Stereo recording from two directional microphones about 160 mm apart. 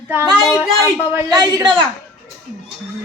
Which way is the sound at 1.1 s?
25° right (ahead or behind).